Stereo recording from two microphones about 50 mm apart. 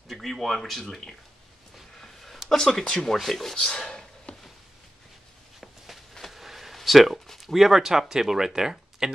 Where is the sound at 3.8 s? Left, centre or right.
Centre.